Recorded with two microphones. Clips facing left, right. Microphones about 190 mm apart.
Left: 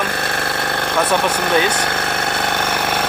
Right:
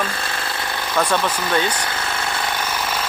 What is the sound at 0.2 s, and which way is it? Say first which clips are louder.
Engine: left 5 dB; 65° left (ahead or behind).